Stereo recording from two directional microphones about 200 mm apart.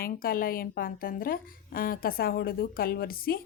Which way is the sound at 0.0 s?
45° left (ahead or behind).